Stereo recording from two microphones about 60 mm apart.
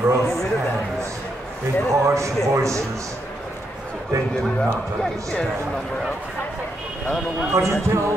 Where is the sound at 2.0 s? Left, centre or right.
Right.